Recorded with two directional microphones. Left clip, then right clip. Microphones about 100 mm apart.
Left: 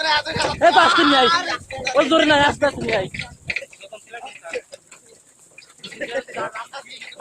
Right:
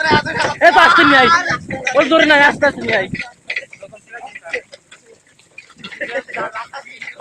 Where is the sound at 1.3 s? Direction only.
35° left (ahead or behind).